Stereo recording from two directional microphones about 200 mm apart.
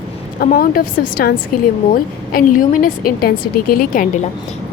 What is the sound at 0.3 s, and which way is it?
A woman's voice, 50° left (ahead or behind).